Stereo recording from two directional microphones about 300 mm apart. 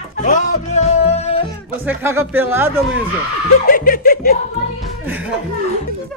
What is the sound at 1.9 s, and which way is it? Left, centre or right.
Speech, centre.